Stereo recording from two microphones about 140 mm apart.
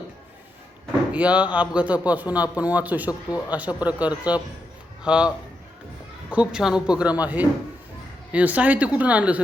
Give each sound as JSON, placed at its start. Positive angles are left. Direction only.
{"t": 1.1, "sound": "a man's voice", "side_deg": -10}
{"t": 3.1, "sound": "a man's voice", "side_deg": 25}
{"t": 3.5, "sound": "a man's voice", "side_deg": -10}
{"t": 6.3, "sound": "a man's voice", "side_deg": -5}